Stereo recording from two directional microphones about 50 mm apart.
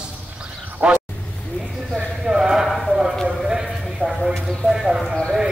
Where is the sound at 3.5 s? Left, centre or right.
Centre.